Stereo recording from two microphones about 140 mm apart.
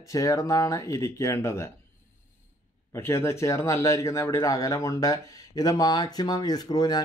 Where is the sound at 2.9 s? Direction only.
20° left (ahead or behind).